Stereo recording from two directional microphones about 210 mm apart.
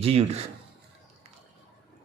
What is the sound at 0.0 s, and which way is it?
Speech, 30° right (ahead or behind).